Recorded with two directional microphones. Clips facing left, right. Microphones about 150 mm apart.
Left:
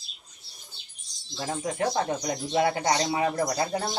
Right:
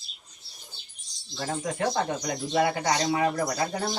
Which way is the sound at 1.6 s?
5° left (ahead or behind).